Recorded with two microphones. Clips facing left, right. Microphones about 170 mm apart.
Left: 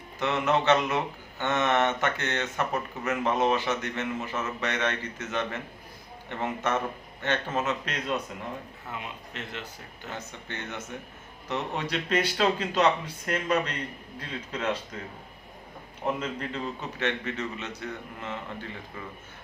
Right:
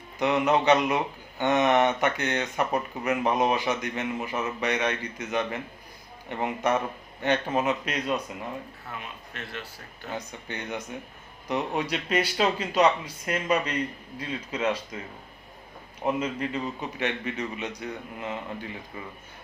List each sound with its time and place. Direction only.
0.2 s speech: 15° right (ahead or behind)
8.9 s speech: 20° left (ahead or behind)
10.1 s speech: 15° right (ahead or behind)
16.2 s speech: 10° right (ahead or behind)